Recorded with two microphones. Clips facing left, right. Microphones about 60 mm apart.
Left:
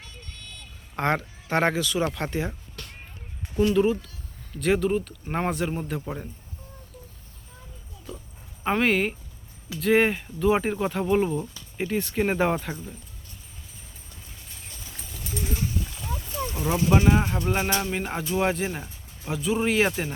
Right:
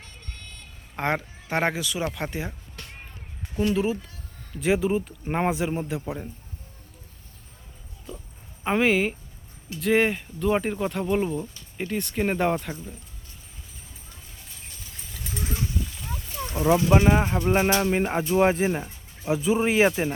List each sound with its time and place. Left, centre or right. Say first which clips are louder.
0.9 s speech: left 1 dB; centre
2.8 s basketball bounce: right 1 dB; centre
3.5 s speech: left 3 dB; centre
8.6 s speech: right 1 dB; centre
16.6 s speech: right 3 dB; right